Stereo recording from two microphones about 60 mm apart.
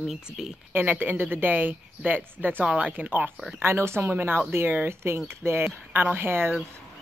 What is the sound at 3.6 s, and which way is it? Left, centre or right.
Speech, right.